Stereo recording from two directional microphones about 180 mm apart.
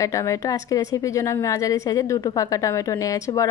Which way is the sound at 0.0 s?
15° left (ahead or behind).